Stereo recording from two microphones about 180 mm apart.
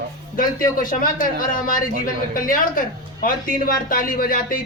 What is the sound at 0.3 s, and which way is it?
Speech, 50° left (ahead or behind).